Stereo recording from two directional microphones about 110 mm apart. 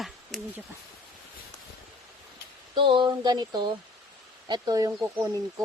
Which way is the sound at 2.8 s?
50° right (ahead or behind).